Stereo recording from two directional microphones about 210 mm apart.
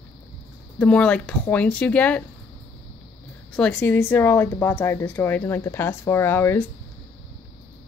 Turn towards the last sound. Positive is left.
turn(degrees=10)  # may be behind; listen again after turning